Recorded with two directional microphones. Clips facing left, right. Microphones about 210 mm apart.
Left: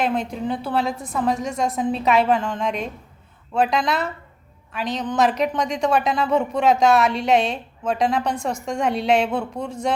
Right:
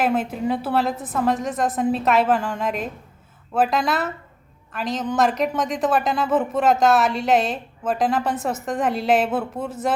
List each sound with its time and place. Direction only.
0.0 s a woman's voice: 5° right (ahead or behind)